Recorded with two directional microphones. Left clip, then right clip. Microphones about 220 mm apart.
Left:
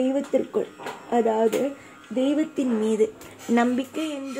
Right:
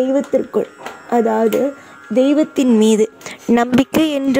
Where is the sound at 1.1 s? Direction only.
35° right (ahead or behind).